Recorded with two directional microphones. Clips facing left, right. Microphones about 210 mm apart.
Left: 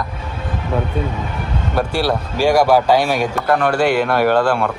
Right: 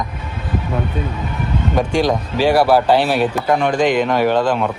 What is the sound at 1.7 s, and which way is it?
Speech, 5° left (ahead or behind).